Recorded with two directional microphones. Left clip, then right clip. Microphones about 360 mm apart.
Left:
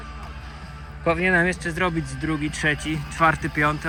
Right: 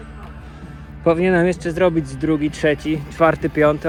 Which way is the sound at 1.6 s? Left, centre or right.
Centre.